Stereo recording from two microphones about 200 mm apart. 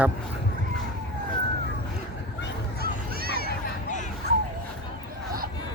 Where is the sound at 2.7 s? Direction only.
50° right (ahead or behind).